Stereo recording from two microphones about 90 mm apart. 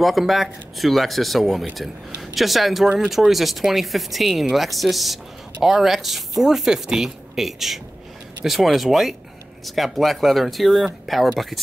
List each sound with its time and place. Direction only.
0.0 s speech: centre (ahead or behind)